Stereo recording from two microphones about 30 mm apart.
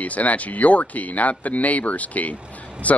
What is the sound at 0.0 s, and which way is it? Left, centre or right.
Speech, left.